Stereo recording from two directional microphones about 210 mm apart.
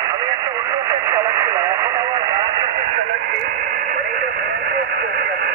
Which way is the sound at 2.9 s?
50° right (ahead or behind).